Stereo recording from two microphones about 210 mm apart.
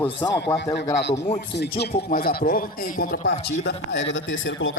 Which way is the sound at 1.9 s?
40° left (ahead or behind).